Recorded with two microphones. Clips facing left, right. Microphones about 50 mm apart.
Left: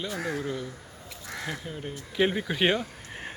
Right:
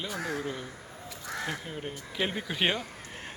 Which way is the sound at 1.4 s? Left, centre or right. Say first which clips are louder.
Left 3 dB; centre.